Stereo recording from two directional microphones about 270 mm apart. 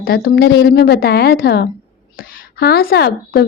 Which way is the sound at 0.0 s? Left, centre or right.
Left.